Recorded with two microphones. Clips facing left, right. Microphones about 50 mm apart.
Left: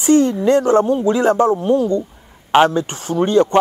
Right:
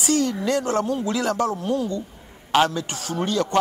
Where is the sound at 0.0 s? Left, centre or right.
Left.